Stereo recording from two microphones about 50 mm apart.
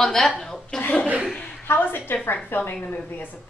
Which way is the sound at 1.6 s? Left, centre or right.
Left.